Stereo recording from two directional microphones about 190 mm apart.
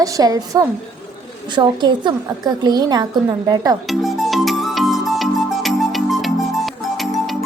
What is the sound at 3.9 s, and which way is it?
Music, centre (ahead or behind).